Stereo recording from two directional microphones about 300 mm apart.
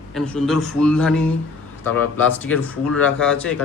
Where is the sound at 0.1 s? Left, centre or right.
Centre.